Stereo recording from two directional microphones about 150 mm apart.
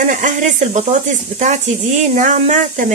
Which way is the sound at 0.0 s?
60° right (ahead or behind).